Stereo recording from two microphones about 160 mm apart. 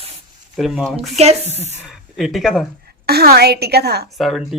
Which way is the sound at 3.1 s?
80° right.